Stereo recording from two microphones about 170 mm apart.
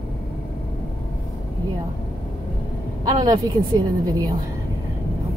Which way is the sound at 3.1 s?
25° right (ahead or behind).